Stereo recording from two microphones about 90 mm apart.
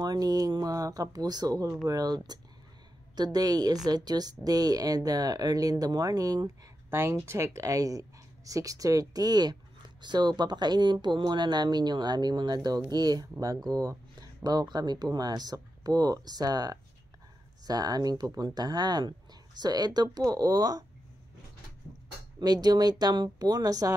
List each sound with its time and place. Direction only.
0.0 s speech: 45° right (ahead or behind)
6.9 s speech: 30° right (ahead or behind); by 20.8 s 45° right (ahead or behind)
22.4 s speech: 50° right (ahead or behind)